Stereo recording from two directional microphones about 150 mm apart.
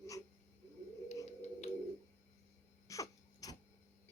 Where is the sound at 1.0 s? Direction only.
50° left (ahead or behind).